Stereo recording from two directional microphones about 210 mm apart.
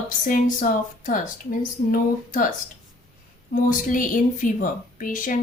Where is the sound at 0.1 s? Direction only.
40° left (ahead or behind).